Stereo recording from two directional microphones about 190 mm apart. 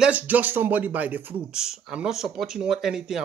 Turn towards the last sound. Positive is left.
turn(degrees=0)  # may be behind; listen again after turning